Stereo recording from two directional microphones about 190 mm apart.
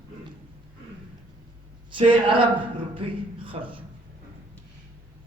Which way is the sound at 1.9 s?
25° right (ahead or behind).